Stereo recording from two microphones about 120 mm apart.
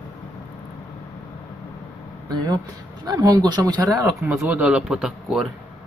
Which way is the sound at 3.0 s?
30° right (ahead or behind).